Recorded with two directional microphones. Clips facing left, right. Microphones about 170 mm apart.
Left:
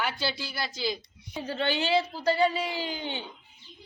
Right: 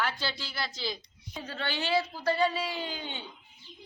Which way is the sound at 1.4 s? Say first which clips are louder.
Left 6 dB; 25° left (ahead or behind).